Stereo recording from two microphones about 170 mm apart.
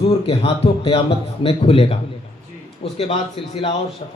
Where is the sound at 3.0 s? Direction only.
35° left (ahead or behind).